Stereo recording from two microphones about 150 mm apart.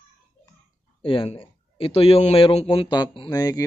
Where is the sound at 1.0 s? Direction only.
35° left (ahead or behind).